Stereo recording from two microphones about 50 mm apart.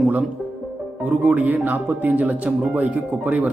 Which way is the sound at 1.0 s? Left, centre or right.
Right.